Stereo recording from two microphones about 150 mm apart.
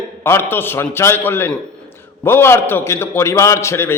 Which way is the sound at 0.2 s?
15° left (ahead or behind).